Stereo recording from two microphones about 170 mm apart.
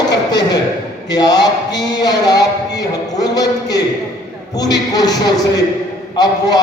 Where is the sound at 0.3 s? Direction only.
25° left (ahead or behind).